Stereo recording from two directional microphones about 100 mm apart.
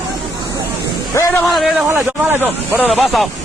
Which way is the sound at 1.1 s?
30° left (ahead or behind).